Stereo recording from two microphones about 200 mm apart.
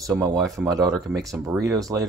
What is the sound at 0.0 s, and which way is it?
Speech, 15° right (ahead or behind).